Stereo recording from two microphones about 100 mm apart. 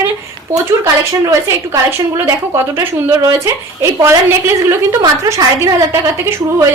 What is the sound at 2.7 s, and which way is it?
A woman's voice, 30° right (ahead or behind).